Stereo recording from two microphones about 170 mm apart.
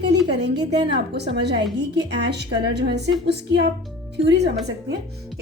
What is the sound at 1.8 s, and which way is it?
A woman's voice, 80° right.